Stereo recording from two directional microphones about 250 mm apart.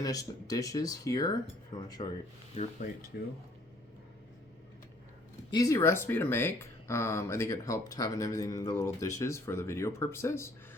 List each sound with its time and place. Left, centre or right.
0.0 s speech: centre
2.6 s speech: left
3.1 s speech: left
5.5 s speech: centre